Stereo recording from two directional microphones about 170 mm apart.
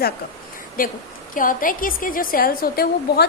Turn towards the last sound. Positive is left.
turn(degrees=65)  # may be behind; listen again after turning